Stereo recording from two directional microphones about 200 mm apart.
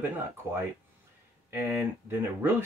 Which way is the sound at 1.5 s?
10° right (ahead or behind).